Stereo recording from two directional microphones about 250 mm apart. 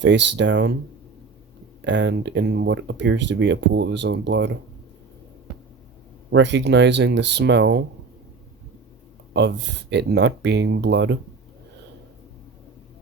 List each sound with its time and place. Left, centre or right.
0.0 s speech: right
1.8 s speech: right
6.3 s speech: right
9.3 s speech: right